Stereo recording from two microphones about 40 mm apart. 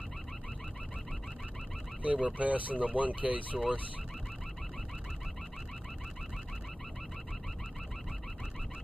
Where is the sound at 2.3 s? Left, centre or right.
Right.